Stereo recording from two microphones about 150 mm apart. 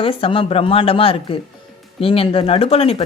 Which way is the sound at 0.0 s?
35° left (ahead or behind).